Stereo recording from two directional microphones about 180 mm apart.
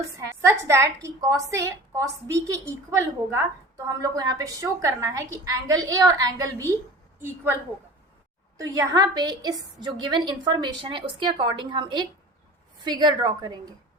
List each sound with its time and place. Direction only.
0.2 s a woman's voice: 15° right (ahead or behind)
8.7 s a woman's voice: 20° right (ahead or behind)